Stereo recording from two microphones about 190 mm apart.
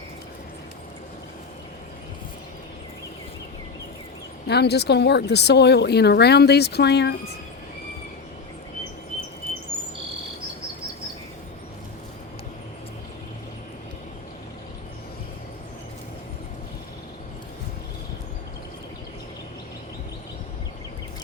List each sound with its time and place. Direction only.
4.4 s speech: 60° left (ahead or behind)